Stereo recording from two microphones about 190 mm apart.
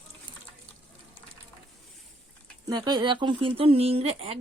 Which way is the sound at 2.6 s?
20° right (ahead or behind).